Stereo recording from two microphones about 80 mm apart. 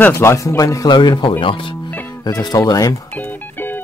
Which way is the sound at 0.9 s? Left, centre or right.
Left.